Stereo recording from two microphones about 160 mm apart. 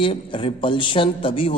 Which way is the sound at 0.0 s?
35° left (ahead or behind).